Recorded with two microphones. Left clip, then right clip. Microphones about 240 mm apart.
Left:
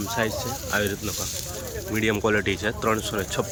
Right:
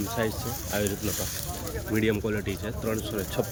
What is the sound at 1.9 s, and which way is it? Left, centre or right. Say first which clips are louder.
Speech: left 5 dB; centre.